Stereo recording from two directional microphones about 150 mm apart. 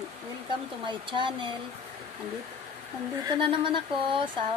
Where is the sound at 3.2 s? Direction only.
35° right (ahead or behind).